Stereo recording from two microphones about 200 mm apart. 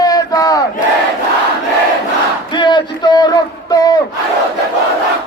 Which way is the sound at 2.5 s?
25° left (ahead or behind).